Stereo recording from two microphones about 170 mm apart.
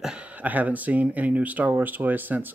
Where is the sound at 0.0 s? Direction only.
5° right (ahead or behind).